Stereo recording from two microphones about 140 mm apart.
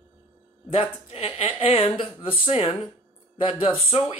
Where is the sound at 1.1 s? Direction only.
45° left (ahead or behind).